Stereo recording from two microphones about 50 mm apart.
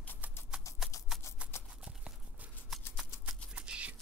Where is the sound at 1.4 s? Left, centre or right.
Right.